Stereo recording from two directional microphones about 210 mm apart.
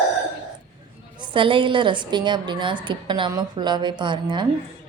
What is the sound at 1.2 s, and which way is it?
A woman's voice, 25° right (ahead or behind).